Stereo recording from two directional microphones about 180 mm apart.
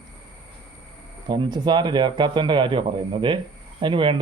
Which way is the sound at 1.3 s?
25° right (ahead or behind).